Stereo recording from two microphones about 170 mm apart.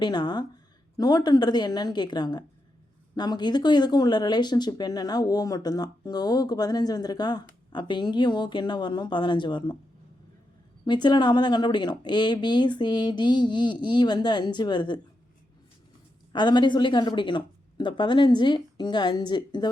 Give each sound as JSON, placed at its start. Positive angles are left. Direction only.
{"t": 0.0, "sound": "speech", "side_deg": 25}
{"t": 10.8, "sound": "speech", "side_deg": 25}
{"t": 16.3, "sound": "speech", "side_deg": 25}